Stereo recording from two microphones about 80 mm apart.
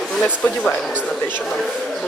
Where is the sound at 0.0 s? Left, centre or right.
Centre.